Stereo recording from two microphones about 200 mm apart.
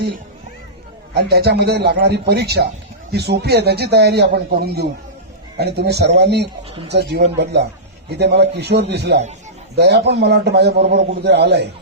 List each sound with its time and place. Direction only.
1.1 s a man's voice: 55° right (ahead or behind)